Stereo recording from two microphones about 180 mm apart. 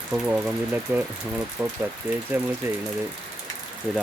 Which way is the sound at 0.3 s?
10° right (ahead or behind).